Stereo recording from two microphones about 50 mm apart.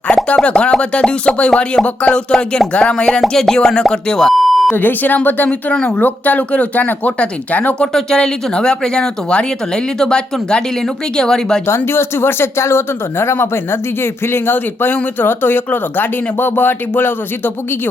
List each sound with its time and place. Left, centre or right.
0.1 s plop: left
0.4 s speech: left
4.4 s beep: centre
4.7 s speech: left
7.9 s speech: centre
11.9 s speech: left